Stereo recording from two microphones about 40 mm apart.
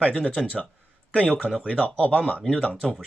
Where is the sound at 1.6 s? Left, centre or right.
Left.